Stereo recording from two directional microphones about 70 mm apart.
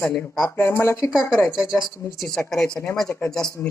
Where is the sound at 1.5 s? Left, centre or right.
Centre.